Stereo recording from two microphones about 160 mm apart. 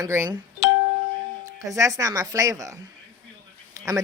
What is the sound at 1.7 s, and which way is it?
Speech, 20° right (ahead or behind).